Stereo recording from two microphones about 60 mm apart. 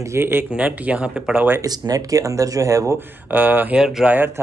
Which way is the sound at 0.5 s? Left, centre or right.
Centre.